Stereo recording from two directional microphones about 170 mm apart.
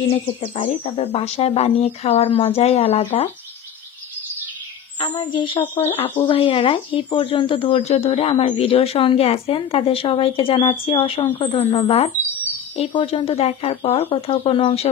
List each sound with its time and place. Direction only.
0.1 s speech: 40° left (ahead or behind)
5.0 s a woman's voice: 30° left (ahead or behind)
5.6 s speech: 10° left (ahead or behind)
6.0 s speech: 30° left (ahead or behind)